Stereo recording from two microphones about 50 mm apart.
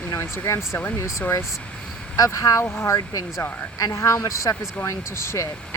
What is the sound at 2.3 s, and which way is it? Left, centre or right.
Speech, left.